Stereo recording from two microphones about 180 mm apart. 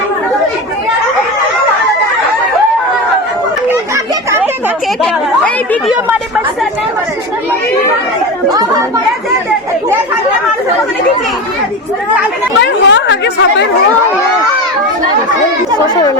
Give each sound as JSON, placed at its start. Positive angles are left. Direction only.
{"t": 3.9, "sound": "children playing", "side_deg": -15}
{"t": 12.5, "sound": "speech", "side_deg": 80}